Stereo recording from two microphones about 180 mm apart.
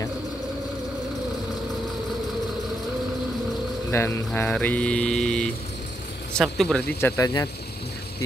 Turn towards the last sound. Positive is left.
turn(degrees=15)  # may be behind; listen again after turning